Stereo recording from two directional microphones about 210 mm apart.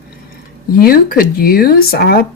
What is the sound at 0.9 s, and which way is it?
Speech, 45° left (ahead or behind).